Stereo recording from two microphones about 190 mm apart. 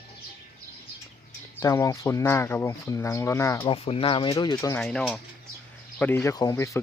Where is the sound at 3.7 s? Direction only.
30° left (ahead or behind).